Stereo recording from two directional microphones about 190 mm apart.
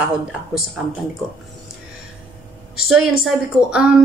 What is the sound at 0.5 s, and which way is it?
Speech, 5° right (ahead or behind).